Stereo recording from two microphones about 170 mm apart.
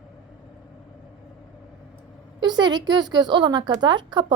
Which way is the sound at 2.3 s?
25° right (ahead or behind).